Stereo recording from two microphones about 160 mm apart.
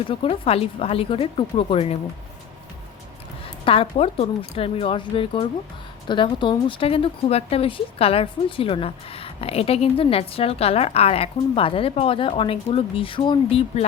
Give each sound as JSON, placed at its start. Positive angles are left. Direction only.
{"t": 0.1, "sound": "speech", "side_deg": 35}
{"t": 3.4, "sound": "speech", "side_deg": 35}